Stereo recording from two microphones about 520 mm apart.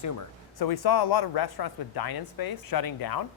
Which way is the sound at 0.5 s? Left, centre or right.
Left.